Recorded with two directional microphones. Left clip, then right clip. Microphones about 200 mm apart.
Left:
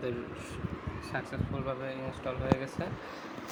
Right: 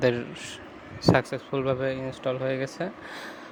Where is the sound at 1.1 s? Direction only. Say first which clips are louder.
Right 10 dB; 45° right (ahead or behind).